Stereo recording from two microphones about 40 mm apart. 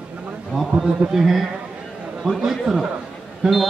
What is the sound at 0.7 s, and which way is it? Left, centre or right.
Speech, centre.